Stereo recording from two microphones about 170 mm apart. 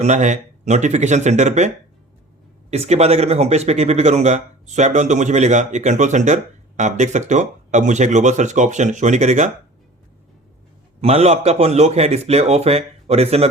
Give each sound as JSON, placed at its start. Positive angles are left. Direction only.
{"t": 0.0, "sound": "speech", "side_deg": -45}
{"t": 11.0, "sound": "a man's voice", "side_deg": -40}